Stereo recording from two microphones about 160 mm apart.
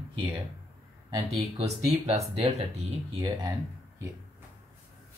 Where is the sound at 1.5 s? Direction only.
40° right (ahead or behind).